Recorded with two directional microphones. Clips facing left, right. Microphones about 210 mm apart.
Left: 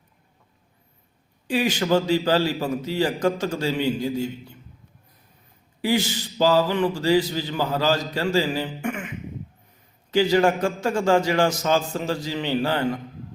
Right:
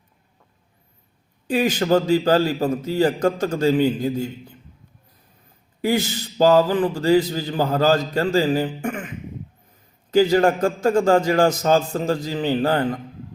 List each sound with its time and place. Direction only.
1.5 s a man's voice: 40° right (ahead or behind)
5.8 s speech: 45° right (ahead or behind)
10.1 s a man's voice: 40° right (ahead or behind)